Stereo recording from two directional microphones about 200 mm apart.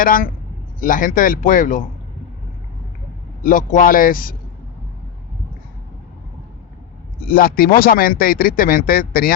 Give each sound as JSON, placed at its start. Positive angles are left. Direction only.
{"t": 0.0, "sound": "speech", "side_deg": 45}
{"t": 3.4, "sound": "speech", "side_deg": 40}
{"t": 7.3, "sound": "speech", "side_deg": 50}